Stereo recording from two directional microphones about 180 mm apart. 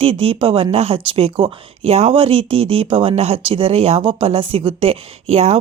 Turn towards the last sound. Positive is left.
turn(degrees=-35)  # may be behind; listen again after turning